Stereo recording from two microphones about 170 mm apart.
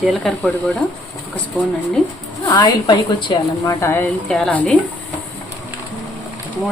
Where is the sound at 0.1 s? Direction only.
Centre (ahead or behind).